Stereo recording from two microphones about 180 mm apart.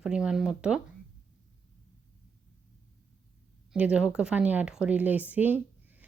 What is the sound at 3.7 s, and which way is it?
Speech, 5° right (ahead or behind).